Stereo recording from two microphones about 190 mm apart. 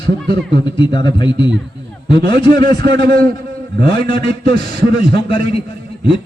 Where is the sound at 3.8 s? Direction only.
55° right (ahead or behind).